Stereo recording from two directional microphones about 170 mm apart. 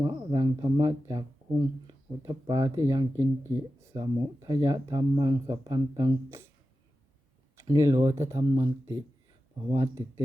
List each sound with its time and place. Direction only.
0.0 s speech: 25° right (ahead or behind)
7.5 s speech: 20° right (ahead or behind)